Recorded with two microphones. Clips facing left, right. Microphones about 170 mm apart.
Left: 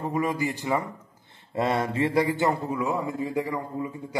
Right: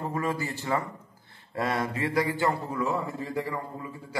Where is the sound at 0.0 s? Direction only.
15° left (ahead or behind).